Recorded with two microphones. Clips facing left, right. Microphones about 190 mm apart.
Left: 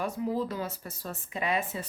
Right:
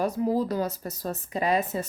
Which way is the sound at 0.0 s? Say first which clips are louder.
Right 5 dB; 40° right (ahead or behind).